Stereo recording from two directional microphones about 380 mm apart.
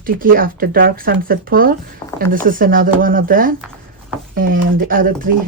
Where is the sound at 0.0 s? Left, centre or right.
Right.